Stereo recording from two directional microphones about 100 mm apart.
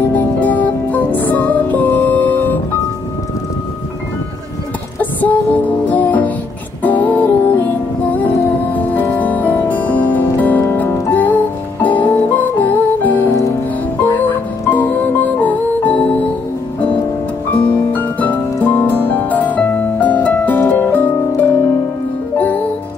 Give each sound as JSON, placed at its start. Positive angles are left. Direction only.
{"t": 0.1, "sound": "music", "side_deg": 15}
{"t": 5.2, "sound": "music", "side_deg": 15}
{"t": 17.5, "sound": "harp", "side_deg": 15}